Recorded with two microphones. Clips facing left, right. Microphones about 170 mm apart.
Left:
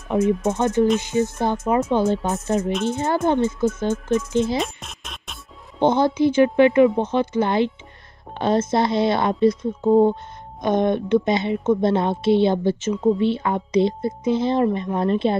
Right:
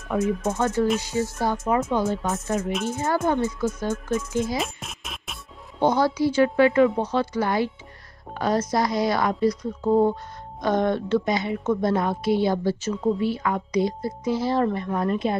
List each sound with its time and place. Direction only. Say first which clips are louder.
0.1 s a woman's voice: left 4 dB; 25° left (ahead or behind)
2.7 s speech: left 4 dB; 5° right (ahead or behind)
3.3 s a woman's voice: left 4 dB; 25° left (ahead or behind)
4.6 s music: left 3 dB; centre (ahead or behind)
5.8 s a woman's voice: left 3 dB; 20° left (ahead or behind)